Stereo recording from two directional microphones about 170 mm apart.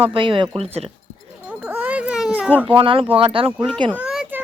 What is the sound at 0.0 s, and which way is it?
Speech, 30° right (ahead or behind).